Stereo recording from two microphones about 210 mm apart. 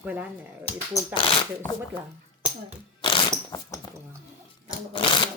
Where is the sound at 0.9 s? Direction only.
25° left (ahead or behind).